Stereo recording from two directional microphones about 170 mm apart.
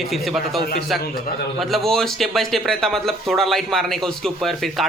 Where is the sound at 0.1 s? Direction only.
Centre (ahead or behind).